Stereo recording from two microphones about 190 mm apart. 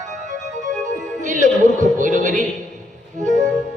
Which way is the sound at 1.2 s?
40° right (ahead or behind).